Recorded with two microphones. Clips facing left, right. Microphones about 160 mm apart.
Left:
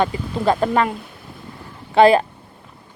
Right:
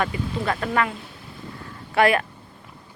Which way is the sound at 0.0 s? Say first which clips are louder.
Left 6 dB; 30° left (ahead or behind).